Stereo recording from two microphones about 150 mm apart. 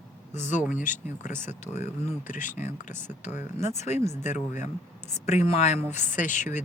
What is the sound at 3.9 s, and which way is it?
Humming, 15° right (ahead or behind).